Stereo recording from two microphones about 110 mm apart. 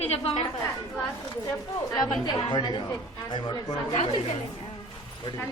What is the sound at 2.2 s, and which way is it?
A woman's voice, 40° left (ahead or behind).